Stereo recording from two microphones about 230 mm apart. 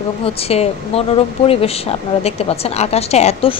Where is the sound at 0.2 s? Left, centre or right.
Left.